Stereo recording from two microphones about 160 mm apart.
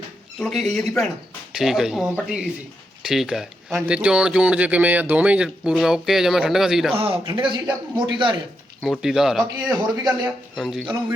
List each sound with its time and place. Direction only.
0.3 s speech: centre (ahead or behind)
6.9 s a man's voice: 35° right (ahead or behind)
8.8 s speech: centre (ahead or behind)